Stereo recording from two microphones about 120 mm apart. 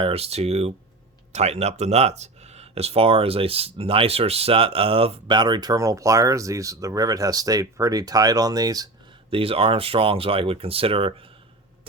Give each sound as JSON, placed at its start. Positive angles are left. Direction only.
{"t": 0.0, "sound": "speech", "side_deg": -55}
{"t": 5.4, "sound": "speech", "side_deg": -35}
{"t": 9.3, "sound": "speech", "side_deg": -50}